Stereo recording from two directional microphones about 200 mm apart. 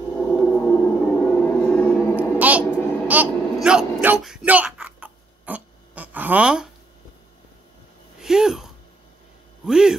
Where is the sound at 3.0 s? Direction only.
5° right (ahead or behind).